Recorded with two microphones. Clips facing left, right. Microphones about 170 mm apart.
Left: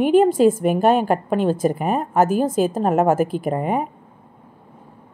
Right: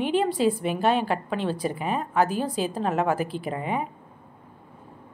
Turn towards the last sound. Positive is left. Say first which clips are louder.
# left 7 dB
turn(degrees=45)  # may be behind; listen again after turning